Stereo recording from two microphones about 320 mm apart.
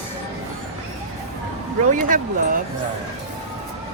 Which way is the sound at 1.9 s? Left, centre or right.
Right.